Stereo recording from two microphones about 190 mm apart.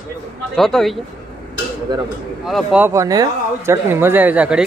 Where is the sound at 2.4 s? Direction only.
Centre (ahead or behind).